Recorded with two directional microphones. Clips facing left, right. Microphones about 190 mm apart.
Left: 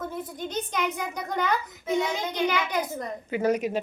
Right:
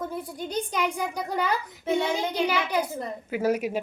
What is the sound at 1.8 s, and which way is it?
A child's voice, 30° right (ahead or behind).